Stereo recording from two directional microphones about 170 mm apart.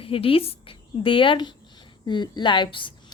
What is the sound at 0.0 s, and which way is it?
A woman's voice, 30° left (ahead or behind).